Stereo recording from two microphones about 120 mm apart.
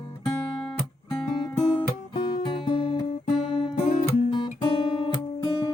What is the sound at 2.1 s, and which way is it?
Music, 45° left (ahead or behind).